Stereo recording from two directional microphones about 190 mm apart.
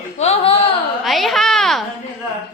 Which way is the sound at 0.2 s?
35° left (ahead or behind).